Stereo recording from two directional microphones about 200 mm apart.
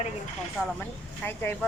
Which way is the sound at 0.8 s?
10° left (ahead or behind).